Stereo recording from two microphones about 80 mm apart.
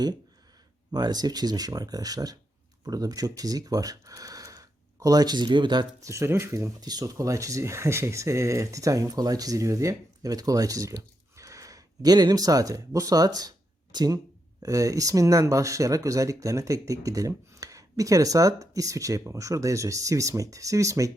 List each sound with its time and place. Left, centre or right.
0.9 s speech: right
6.0 s speech: right
6.7 s speech: right
7.0 s speech: right
14.6 s speech: right